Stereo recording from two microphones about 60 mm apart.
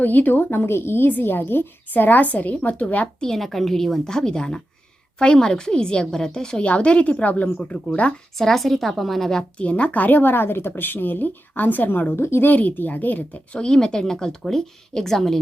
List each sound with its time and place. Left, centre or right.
0.0 s a woman's voice: left
3.2 s a woman's voice: centre; by 7.5 s left
7.5 s a woman's voice: centre
8.4 s a woman's voice: centre
9.6 s a woman's voice: left
12.2 s speech: left
12.5 s speech: left
13.6 s a woman's voice: centre